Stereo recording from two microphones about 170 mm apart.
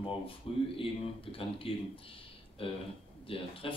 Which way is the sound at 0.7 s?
30° left (ahead or behind).